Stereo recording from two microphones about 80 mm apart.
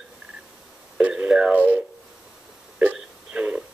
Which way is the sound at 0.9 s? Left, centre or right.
Centre.